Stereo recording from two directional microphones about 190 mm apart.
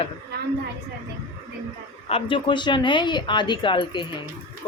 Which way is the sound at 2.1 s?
25° left (ahead or behind).